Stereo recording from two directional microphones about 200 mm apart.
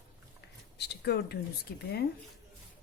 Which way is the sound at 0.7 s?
55° left (ahead or behind).